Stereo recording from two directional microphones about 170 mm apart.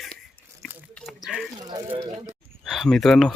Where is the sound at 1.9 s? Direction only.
25° right (ahead or behind).